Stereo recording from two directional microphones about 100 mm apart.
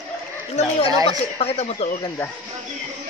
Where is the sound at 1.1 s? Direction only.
90° left.